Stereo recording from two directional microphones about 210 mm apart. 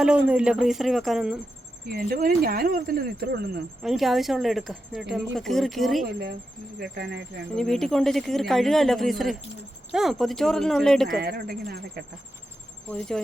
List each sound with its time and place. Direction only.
0.0 s a woman's voice: 5° right (ahead or behind)
1.9 s speech: 45° right (ahead or behind)
3.8 s a woman's voice: centre (ahead or behind)
6.7 s speech: 50° right (ahead or behind)
7.5 s a woman's voice: centre (ahead or behind)
11.2 s speech: 45° right (ahead or behind)
12.9 s a woman's voice: 5° left (ahead or behind)